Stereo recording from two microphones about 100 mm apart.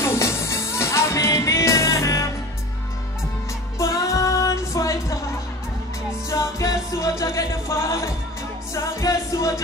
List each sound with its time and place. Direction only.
0.0 s music: 25° left (ahead or behind)
3.7 s music: 30° left (ahead or behind)
6.3 s music: 30° left (ahead or behind)